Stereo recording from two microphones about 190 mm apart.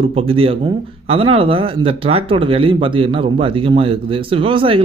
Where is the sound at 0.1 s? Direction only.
30° right (ahead or behind).